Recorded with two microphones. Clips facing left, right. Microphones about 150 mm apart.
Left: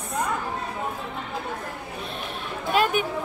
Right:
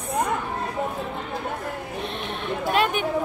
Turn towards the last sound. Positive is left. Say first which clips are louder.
# even
turn(degrees=5)  # may be behind; listen again after turning